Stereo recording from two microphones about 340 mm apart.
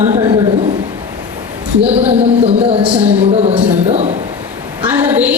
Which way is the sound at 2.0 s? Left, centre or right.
Centre.